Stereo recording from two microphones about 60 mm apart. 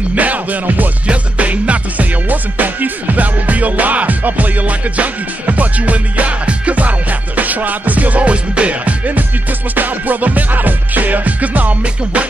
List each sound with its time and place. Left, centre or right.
0.1 s music: right